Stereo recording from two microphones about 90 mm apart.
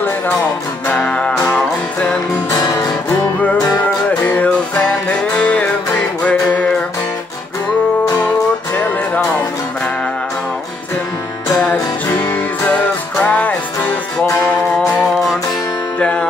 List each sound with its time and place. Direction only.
0.8 s music: 15° left (ahead or behind)
2.5 s guitar: 45° left (ahead or behind)
4.2 s music: 20° left (ahead or behind)
8.7 s music: 20° left (ahead or behind)
11.5 s music: 10° left (ahead or behind)
16.0 s music: 10° left (ahead or behind)